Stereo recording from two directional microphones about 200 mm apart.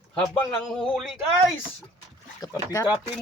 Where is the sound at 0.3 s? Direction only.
Centre (ahead or behind).